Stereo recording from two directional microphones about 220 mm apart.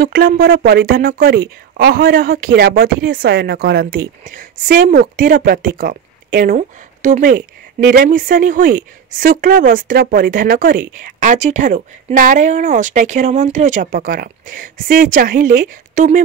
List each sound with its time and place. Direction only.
0.0 s speech: 40° right (ahead or behind)